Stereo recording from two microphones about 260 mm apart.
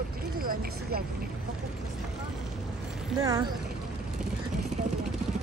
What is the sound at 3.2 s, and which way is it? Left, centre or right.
Speech, centre.